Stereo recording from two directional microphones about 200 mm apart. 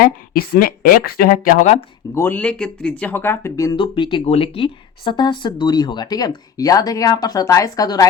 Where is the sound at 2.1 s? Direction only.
10° left (ahead or behind).